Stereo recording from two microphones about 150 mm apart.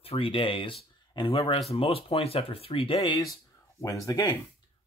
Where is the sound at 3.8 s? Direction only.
20° left (ahead or behind).